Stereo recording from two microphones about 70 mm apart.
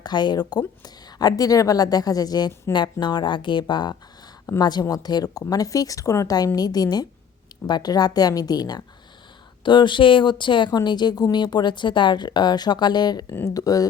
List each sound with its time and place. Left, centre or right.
0.0 s a woman's voice: left
2.7 s speech: left
4.6 s a woman's voice: left
7.7 s a woman's voice: left
10.2 s speech: left
13.4 s a woman's voice: left